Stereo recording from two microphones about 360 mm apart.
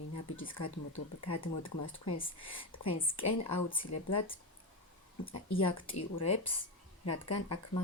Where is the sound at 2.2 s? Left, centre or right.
Centre.